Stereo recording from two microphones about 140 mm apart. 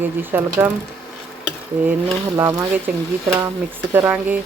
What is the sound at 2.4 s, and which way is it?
Speech, 15° right (ahead or behind).